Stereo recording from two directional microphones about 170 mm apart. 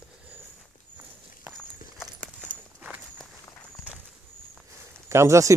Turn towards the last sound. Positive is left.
turn(degrees=-15)  # may be behind; listen again after turning